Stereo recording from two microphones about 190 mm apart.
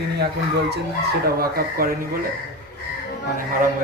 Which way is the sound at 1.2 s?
50° right (ahead or behind).